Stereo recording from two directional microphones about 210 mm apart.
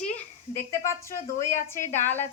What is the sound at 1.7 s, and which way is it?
Speech, 10° left (ahead or behind).